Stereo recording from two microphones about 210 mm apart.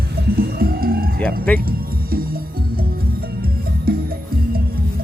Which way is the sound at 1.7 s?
45° right (ahead or behind).